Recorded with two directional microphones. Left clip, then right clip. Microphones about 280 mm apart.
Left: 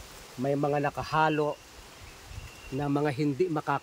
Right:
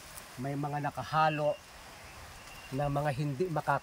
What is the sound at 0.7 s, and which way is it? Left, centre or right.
Speech, left.